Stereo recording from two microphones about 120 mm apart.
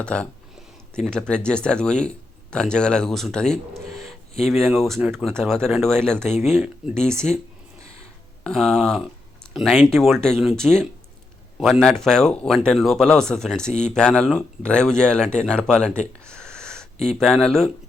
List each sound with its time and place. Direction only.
0.0 s speech: 10° left (ahead or behind)
8.4 s speech: 5° left (ahead or behind)